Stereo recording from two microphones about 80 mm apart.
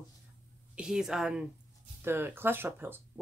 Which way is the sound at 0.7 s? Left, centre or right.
Centre.